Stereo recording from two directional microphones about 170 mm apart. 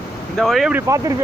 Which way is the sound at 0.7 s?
15° right (ahead or behind).